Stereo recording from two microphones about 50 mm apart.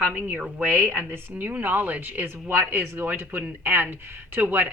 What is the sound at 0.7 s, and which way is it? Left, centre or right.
Speech, right.